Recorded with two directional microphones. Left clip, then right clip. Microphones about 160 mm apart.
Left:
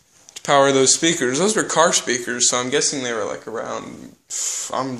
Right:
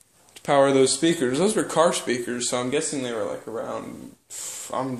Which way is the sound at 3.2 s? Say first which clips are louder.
Left 3 dB; 15° left (ahead or behind).